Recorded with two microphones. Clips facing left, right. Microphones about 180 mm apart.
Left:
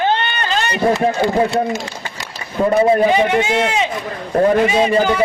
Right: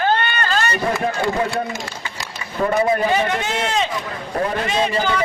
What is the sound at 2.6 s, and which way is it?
Speech, 30° left (ahead or behind).